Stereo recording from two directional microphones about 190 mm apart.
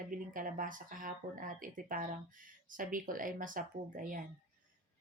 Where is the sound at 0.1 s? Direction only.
45° right (ahead or behind).